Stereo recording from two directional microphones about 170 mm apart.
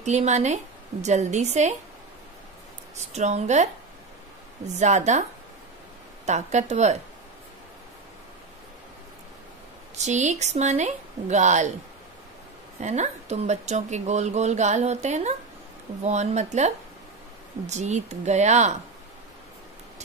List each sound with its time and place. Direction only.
0.0 s speech: 45° right (ahead or behind)
3.1 s a woman's voice: 40° right (ahead or behind)
4.7 s speech: 45° right (ahead or behind)
6.2 s speech: 40° right (ahead or behind)
9.9 s speech: 45° right (ahead or behind)
12.8 s speech: 40° right (ahead or behind)